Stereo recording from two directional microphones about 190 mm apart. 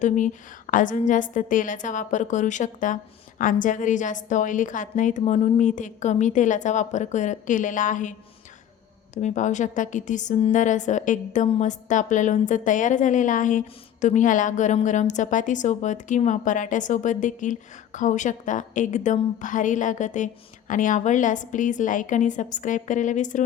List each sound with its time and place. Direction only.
0.7 s a woman's voice: 45° left (ahead or behind)
9.1 s a woman's voice: 40° left (ahead or behind)